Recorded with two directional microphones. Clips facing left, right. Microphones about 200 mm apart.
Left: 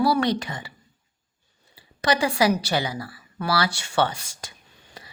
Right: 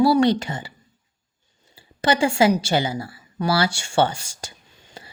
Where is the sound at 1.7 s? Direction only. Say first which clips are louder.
Right 2 dB; 30° right (ahead or behind).